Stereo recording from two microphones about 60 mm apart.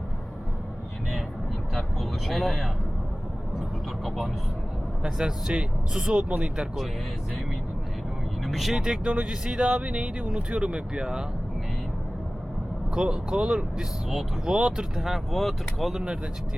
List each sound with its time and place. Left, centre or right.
1.7 s speech: centre
5.0 s speech: centre
6.2 s speech: right
8.4 s speech: centre
12.9 s speech: centre